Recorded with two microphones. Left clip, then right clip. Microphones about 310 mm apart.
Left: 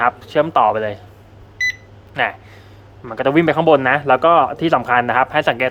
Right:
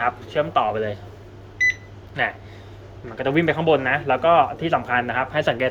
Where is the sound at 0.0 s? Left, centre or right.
Centre.